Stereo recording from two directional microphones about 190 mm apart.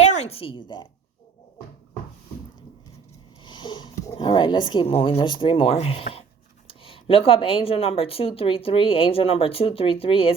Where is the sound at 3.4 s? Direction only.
25° left (ahead or behind).